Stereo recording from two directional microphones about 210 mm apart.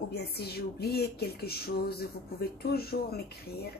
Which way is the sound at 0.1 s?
50° left (ahead or behind).